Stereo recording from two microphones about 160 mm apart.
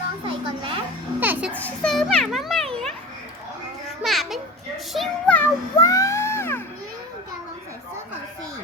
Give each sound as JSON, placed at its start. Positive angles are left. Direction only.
{"t": 0.3, "sound": "a child's voice", "side_deg": -35}
{"t": 1.2, "sound": "a child's voice", "side_deg": -10}
{"t": 1.5, "sound": "a child's voice", "side_deg": 5}
{"t": 4.0, "sound": "children playing", "side_deg": 0}
{"t": 4.9, "sound": "a child's voice", "side_deg": 10}
{"t": 5.8, "sound": "a sound", "side_deg": 20}